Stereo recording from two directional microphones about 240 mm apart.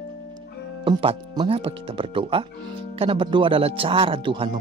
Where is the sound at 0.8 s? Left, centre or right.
Centre.